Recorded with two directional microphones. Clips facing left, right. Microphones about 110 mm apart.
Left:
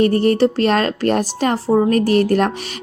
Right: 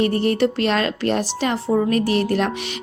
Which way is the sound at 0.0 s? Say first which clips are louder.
Left 4 dB; 40° left (ahead or behind).